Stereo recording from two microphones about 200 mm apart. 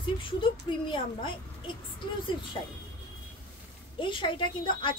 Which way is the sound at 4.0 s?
25° left (ahead or behind).